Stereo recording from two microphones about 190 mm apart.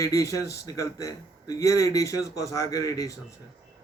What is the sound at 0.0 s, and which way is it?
A man's voice, 15° left (ahead or behind).